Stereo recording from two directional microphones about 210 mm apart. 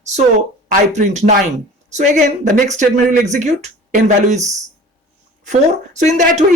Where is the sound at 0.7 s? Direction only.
35° right (ahead or behind).